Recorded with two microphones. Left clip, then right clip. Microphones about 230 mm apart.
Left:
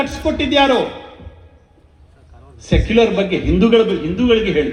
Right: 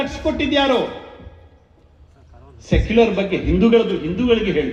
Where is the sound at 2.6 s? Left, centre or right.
Left.